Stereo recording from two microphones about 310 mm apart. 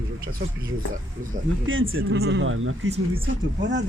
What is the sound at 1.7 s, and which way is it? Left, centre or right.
Speech, right.